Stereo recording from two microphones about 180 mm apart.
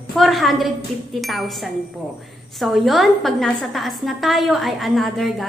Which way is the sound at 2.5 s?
Centre (ahead or behind).